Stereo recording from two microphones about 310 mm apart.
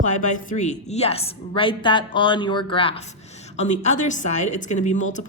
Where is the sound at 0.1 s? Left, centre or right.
Left.